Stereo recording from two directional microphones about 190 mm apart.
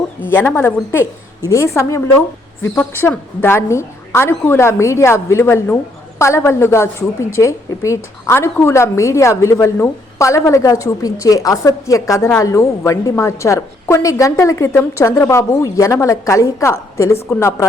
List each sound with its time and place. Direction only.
0.2 s a woman's voice: 10° left (ahead or behind)